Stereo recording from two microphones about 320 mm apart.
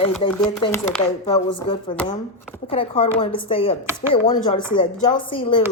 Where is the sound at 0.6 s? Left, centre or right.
Centre.